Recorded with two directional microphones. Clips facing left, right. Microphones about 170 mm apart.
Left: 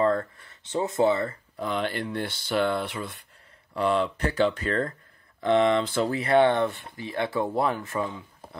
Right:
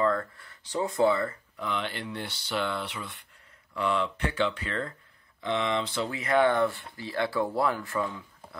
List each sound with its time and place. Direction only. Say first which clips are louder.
0.0 s a sound: left 3 dB; 30° left (ahead or behind)
0.4 s speech: left 2 dB; 25° left (ahead or behind)
1.6 s speech: left 5 dB; 40° left (ahead or behind)
6.0 s speech: left 3 dB; 35° left (ahead or behind)